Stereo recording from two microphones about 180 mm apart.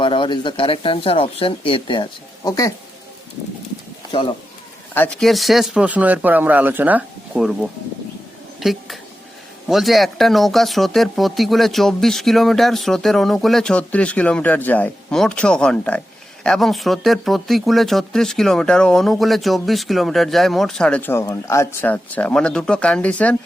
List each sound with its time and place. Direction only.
0.0 s speech: 25° left (ahead or behind)
4.9 s speech: 5° left (ahead or behind)